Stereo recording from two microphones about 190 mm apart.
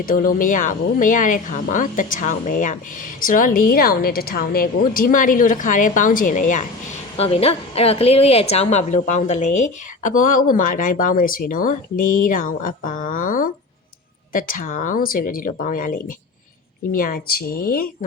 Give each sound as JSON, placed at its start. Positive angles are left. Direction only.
{"t": 0.0, "sound": "speech", "side_deg": 45}
{"t": 7.2, "sound": "speech", "side_deg": 30}